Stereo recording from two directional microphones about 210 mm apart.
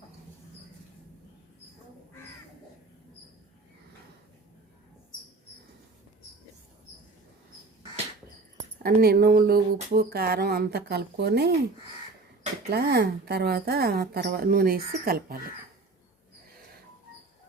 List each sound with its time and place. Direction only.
8.8 s speech: 45° right (ahead or behind)
12.7 s speech: 50° right (ahead or behind)